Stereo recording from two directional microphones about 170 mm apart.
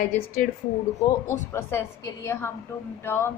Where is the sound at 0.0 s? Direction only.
60° left (ahead or behind).